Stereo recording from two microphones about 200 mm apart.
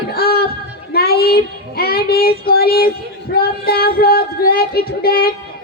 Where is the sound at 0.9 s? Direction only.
50° left (ahead or behind).